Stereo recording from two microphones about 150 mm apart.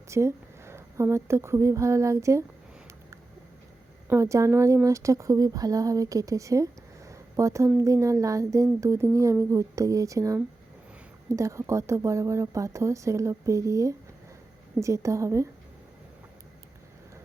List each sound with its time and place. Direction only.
0.1 s speech: 20° right (ahead or behind)
4.1 s speech: 20° right (ahead or behind)